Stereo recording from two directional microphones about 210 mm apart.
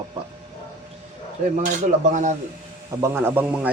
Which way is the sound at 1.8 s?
35° right (ahead or behind).